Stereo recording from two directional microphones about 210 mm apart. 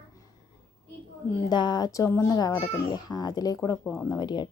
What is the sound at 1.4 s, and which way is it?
A woman's voice, 20° left (ahead or behind).